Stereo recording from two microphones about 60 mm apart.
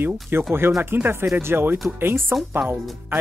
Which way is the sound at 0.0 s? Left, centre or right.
Right.